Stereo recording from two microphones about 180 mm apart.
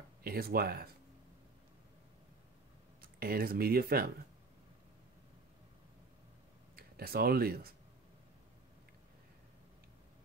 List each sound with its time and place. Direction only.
0.2 s speech: 55° right (ahead or behind)
3.0 s speech: 55° right (ahead or behind)
6.7 s speech: 55° right (ahead or behind)